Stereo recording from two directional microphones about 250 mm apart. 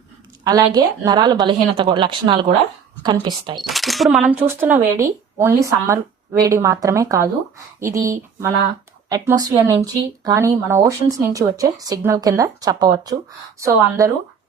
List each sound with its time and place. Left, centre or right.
0.4 s speech: centre
3.6 s speech: centre